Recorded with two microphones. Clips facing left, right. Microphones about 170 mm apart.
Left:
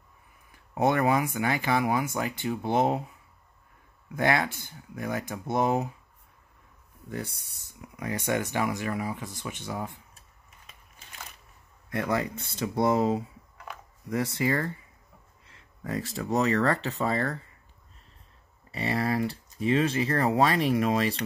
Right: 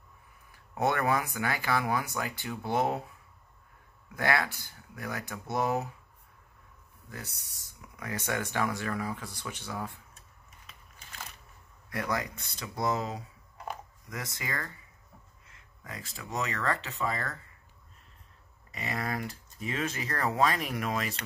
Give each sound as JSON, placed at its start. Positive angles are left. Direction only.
{"t": 0.7, "sound": "speech", "side_deg": 20}
{"t": 4.1, "sound": "speech", "side_deg": 20}
{"t": 7.1, "sound": "speech", "side_deg": 25}
{"t": 11.9, "sound": "speech", "side_deg": 25}
{"t": 18.7, "sound": "speech", "side_deg": 35}